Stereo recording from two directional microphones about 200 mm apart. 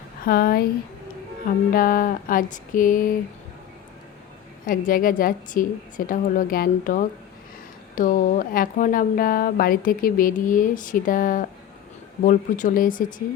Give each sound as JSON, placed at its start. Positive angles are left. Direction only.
{"t": 0.3, "sound": "speech", "side_deg": 50}
{"t": 4.6, "sound": "speech", "side_deg": 45}